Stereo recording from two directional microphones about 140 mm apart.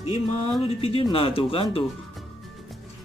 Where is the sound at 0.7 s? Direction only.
45° left (ahead or behind).